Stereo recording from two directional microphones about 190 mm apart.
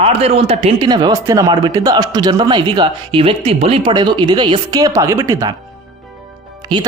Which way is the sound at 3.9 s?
25° right (ahead or behind).